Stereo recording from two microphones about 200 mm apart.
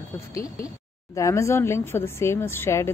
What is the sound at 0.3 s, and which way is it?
A woman's voice, 15° left (ahead or behind).